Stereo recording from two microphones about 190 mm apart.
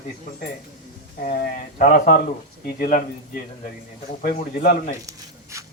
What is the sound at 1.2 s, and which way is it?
A man's voice, 45° left (ahead or behind).